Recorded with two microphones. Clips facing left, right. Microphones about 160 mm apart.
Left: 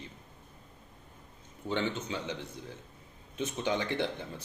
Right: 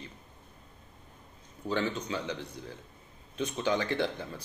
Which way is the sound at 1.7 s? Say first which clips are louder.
Right 1 dB; 25° left (ahead or behind).